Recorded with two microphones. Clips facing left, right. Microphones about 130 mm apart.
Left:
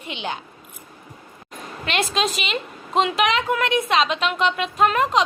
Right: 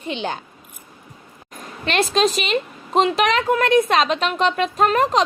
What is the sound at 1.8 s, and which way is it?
A woman's voice, 40° right (ahead or behind).